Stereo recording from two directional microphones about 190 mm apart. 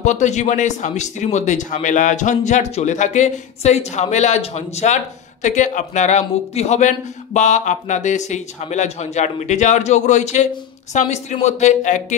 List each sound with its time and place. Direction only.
0.0 s speech: 40° left (ahead or behind)